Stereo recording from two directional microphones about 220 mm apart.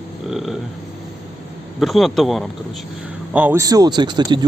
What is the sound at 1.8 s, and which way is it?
Speech, centre (ahead or behind).